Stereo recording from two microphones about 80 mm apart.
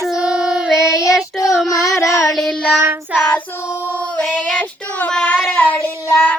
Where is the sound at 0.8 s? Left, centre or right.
Left.